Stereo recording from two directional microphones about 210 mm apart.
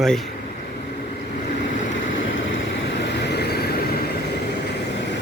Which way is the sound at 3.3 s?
50° left (ahead or behind).